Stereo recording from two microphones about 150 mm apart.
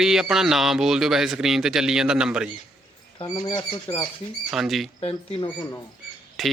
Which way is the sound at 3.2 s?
30° left (ahead or behind).